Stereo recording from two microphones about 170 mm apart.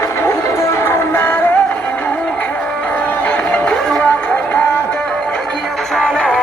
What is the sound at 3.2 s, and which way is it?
Music, 10° left (ahead or behind).